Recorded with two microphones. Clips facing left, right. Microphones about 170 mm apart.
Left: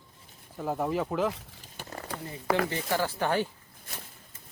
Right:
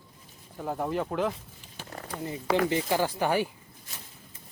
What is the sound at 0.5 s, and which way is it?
Speech, centre (ahead or behind).